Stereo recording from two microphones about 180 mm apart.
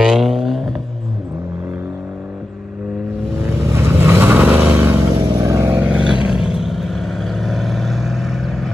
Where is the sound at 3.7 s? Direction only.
15° right (ahead or behind).